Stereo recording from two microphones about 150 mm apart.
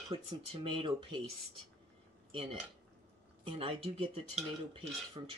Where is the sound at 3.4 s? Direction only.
40° right (ahead or behind).